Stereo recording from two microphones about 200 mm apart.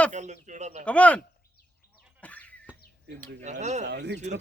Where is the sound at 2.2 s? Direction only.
5° left (ahead or behind).